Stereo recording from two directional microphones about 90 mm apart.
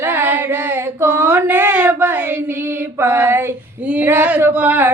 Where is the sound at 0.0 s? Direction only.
20° right (ahead or behind).